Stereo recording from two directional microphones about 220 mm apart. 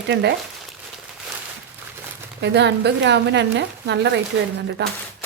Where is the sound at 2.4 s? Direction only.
50° right (ahead or behind).